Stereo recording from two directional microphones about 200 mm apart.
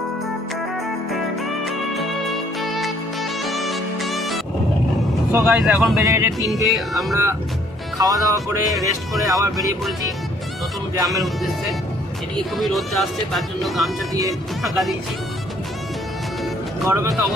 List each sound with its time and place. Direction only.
1.6 s music: centre (ahead or behind)
5.3 s speech: 5° right (ahead or behind)
6.1 s speech: 15° right (ahead or behind)
6.7 s speech: centre (ahead or behind)
7.1 s speech: 15° right (ahead or behind)
12.5 s speech: centre (ahead or behind)
14.1 s speech: 15° right (ahead or behind)
14.6 s speech: centre (ahead or behind)
16.8 s speech: 15° right (ahead or behind)